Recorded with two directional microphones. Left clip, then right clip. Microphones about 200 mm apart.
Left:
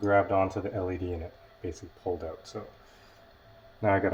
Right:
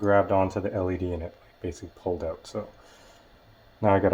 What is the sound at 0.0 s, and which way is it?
Speech, 35° right (ahead or behind).